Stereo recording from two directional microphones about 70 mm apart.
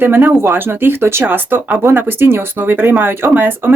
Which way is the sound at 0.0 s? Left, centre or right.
Right.